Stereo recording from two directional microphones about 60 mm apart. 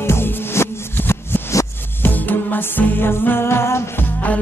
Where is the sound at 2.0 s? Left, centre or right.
Left.